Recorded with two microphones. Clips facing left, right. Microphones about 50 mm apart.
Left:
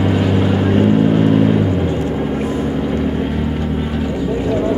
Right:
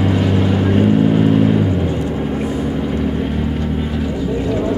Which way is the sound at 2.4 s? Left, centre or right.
Left.